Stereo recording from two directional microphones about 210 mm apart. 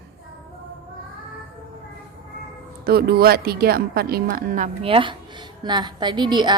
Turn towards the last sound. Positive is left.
turn(degrees=-20)  # may be behind; listen again after turning